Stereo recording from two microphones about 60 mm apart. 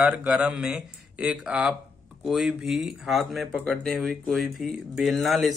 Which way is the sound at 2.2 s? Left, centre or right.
Centre.